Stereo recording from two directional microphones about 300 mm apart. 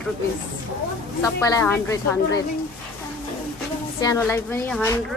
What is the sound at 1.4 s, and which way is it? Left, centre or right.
Speech, centre.